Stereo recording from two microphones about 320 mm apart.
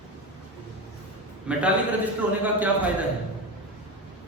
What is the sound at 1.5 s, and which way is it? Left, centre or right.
A man's voice, centre.